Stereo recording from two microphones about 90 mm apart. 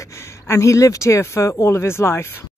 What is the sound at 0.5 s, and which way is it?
Speech, 35° left (ahead or behind).